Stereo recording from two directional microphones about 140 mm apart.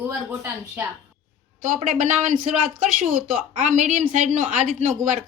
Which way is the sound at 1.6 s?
70° right (ahead or behind).